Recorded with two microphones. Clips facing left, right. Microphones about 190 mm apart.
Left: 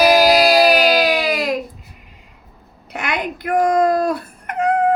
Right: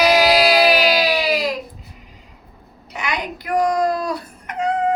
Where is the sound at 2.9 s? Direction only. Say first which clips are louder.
Left 2 dB; 55° left (ahead or behind).